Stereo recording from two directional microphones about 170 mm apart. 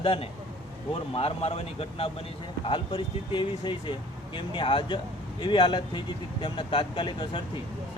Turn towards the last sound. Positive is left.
turn(degrees=30)  # may be behind; listen again after turning